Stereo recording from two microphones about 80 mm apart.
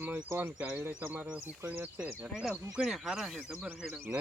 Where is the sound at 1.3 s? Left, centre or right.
Centre.